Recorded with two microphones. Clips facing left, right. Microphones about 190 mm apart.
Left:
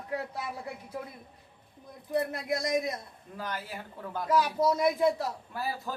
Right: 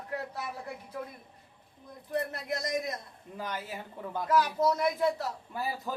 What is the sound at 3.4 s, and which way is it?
Speech, 20° right (ahead or behind).